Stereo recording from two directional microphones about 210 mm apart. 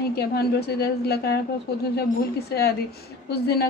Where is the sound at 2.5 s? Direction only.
50° left (ahead or behind).